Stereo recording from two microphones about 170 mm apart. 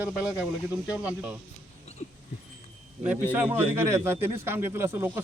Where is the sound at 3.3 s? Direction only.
10° right (ahead or behind).